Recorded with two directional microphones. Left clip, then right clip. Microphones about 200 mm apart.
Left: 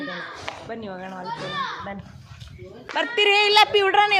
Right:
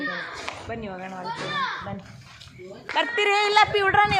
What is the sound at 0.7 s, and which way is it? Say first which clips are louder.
Speech: even; 5° left (ahead or behind).